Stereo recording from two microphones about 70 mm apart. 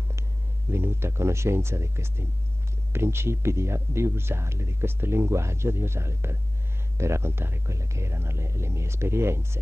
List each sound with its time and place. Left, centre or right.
0.7 s speech: right